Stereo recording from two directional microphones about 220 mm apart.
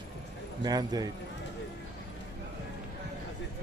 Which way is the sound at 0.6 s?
15° right (ahead or behind).